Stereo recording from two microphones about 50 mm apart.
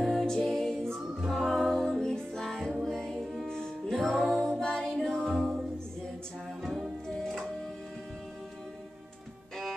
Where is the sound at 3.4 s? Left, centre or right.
Centre.